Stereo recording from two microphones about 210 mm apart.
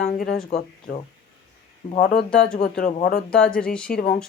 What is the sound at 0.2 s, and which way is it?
Speech, 45° left (ahead or behind).